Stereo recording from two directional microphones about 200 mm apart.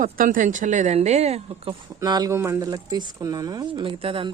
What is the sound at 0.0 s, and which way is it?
Speech, 40° right (ahead or behind).